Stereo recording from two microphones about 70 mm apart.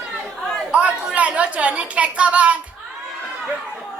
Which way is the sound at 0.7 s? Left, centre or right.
Centre.